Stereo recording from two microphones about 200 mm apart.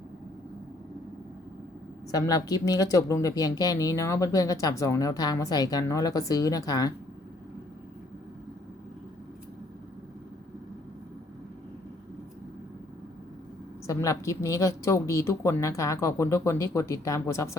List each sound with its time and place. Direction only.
2.1 s speech: 15° left (ahead or behind)
13.8 s speech: 15° left (ahead or behind)